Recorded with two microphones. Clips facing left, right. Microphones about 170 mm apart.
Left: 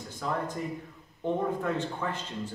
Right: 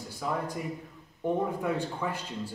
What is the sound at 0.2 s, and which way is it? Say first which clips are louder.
A man's voice: even; 10° right (ahead or behind).